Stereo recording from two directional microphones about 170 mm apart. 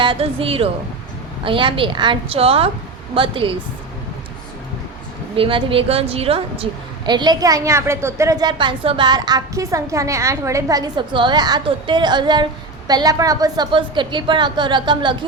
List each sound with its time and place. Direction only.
0.0 s a woman's voice: 30° right (ahead or behind)
5.4 s a woman's voice: 30° right (ahead or behind)